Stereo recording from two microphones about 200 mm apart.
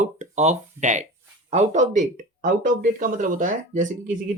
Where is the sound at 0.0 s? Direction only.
35° right (ahead or behind).